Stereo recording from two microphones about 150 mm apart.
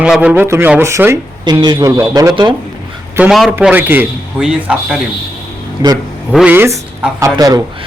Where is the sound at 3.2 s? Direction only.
Centre (ahead or behind).